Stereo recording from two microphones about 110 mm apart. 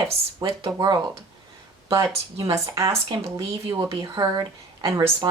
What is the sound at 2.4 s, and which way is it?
Speech, 30° right (ahead or behind).